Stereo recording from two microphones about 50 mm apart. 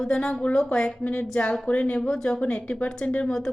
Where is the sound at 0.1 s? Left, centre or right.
Centre.